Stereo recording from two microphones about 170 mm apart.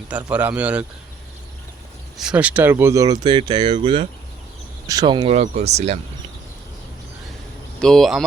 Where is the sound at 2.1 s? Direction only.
5° right (ahead or behind); by 6.0 s 40° right (ahead or behind).